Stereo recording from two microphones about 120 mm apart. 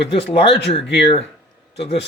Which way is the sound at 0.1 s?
50° left (ahead or behind).